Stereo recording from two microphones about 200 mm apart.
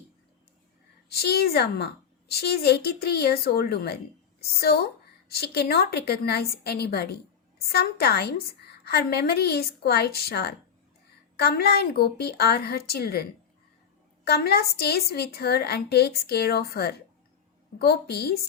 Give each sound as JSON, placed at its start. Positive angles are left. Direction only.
{"t": 1.1, "sound": "a woman's voice", "side_deg": 50}
{"t": 5.3, "sound": "a woman's voice", "side_deg": 50}
{"t": 14.3, "sound": "a woman's voice", "side_deg": 50}